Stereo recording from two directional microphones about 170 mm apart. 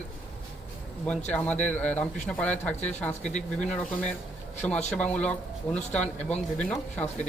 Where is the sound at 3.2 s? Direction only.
45° left (ahead or behind).